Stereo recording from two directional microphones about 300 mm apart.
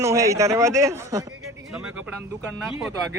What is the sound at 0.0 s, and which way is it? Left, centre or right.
A man's voice, centre.